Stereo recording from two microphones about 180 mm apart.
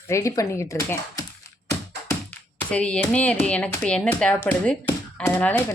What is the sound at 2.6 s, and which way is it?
Speech, 5° left (ahead or behind).